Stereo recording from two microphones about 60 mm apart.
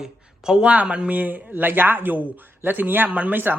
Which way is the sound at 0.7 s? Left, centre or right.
Centre.